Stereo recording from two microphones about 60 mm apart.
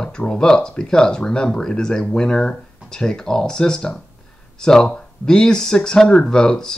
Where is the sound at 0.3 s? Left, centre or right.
Centre.